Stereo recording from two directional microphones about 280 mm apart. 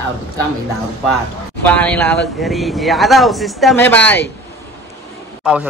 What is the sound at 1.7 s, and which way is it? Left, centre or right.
Speech, centre.